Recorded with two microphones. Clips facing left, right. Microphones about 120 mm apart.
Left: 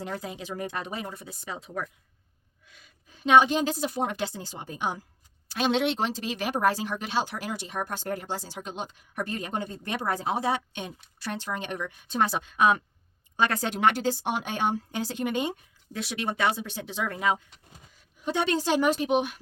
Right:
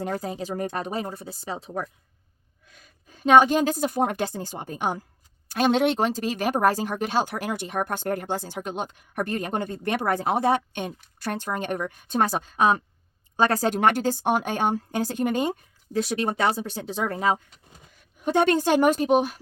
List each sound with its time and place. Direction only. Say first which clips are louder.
0.0 s a woman's voice: right 6 dB; 45° right (ahead or behind)
2.6 s a woman's voice: right 3 dB; 45° right (ahead or behind)
18.2 s speech: right 6 dB; 50° right (ahead or behind)